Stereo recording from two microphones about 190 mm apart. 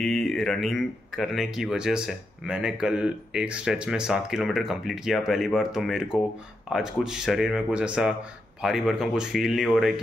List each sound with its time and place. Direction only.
0.0 s speech: centre (ahead or behind)